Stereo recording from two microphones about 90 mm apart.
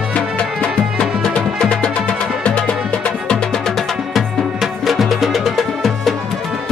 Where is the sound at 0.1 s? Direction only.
10° left (ahead or behind).